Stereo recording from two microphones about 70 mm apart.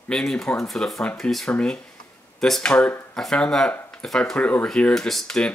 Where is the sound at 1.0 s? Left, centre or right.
Centre.